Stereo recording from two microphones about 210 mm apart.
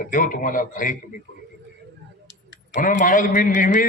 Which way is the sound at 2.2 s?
60° left (ahead or behind).